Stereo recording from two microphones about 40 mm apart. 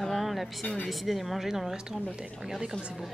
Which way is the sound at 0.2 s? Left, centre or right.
Centre.